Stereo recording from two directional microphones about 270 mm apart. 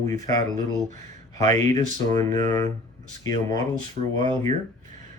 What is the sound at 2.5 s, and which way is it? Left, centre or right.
Speech, right.